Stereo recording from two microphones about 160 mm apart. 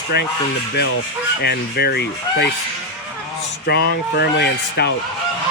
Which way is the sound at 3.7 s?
90° left.